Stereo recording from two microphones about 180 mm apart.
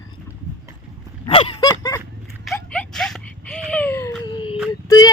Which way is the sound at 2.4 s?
Centre (ahead or behind).